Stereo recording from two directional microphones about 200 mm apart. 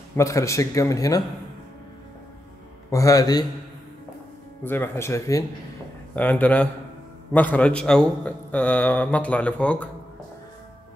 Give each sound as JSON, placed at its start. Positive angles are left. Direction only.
{"t": 0.1, "sound": "a man's voice", "side_deg": 15}
{"t": 2.9, "sound": "a man's voice", "side_deg": 15}
{"t": 4.6, "sound": "a man's voice", "side_deg": 10}